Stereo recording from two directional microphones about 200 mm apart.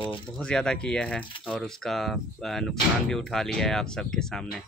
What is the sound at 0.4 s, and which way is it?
Speech, 5° left (ahead or behind).